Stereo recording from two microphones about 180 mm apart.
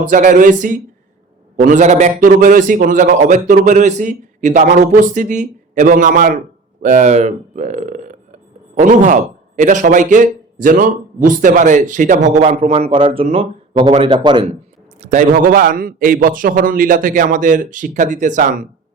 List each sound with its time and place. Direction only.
0.1 s a man's voice: 45° right (ahead or behind); by 14.5 s 25° right (ahead or behind)
15.0 s a man's voice: 45° right (ahead or behind)